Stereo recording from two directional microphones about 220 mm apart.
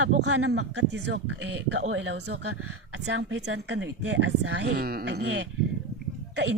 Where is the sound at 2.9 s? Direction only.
55° right (ahead or behind).